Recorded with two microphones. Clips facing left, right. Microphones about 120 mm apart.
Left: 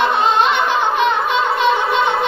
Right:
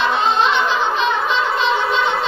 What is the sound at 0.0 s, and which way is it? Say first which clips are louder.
Music: left 2 dB; 55° left (ahead or behind).